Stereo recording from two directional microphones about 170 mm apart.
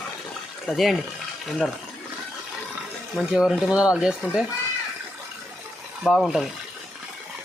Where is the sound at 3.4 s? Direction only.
5° right (ahead or behind).